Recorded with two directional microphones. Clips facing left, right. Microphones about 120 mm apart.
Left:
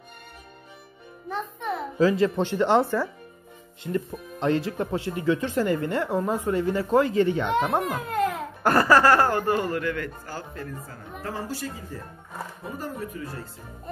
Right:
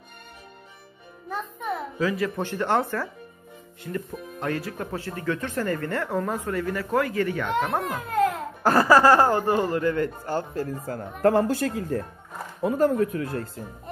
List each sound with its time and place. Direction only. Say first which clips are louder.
1.3 s music: even; centre (ahead or behind)
2.0 s speech: left 6 dB; 30° left (ahead or behind)
7.8 s giggle: right 2 dB; centre (ahead or behind)
8.8 s speech: right 2 dB; 15° right (ahead or behind)
9.8 s speech: right 5 dB; 30° right (ahead or behind)
11.2 s speech: right 12 dB; 60° right (ahead or behind)